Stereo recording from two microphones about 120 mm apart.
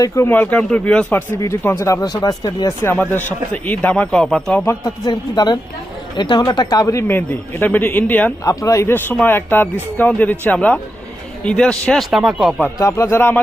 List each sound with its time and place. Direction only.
0.3 s a man's voice: 10° left (ahead or behind)
1.4 s speech: 25° left (ahead or behind)
2.8 s a man's voice: 15° left (ahead or behind)
5.0 s a man's voice: 35° left (ahead or behind); by 8.3 s 15° left (ahead or behind)
8.4 s a man's voice: 25° left (ahead or behind); by 12.5 s centre (ahead or behind)
12.6 s speech: 25° left (ahead or behind)